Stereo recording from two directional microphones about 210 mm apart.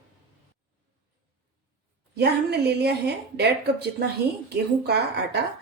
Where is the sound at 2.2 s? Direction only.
50° right (ahead or behind).